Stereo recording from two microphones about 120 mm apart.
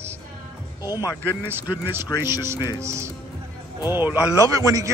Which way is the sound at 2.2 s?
20° right (ahead or behind).